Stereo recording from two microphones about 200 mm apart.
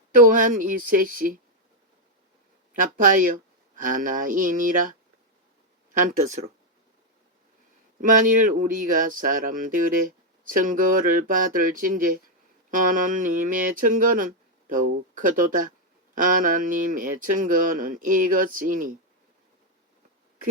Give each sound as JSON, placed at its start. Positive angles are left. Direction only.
{"t": 0.3, "sound": "speech", "side_deg": -40}
{"t": 2.8, "sound": "speech", "side_deg": -40}
{"t": 8.0, "sound": "speech", "side_deg": -40}